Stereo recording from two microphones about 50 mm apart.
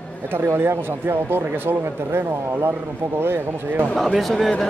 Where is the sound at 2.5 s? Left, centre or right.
Right.